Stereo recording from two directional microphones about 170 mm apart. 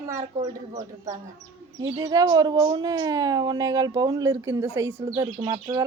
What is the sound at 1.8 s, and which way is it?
A woman's voice, 20° right (ahead or behind).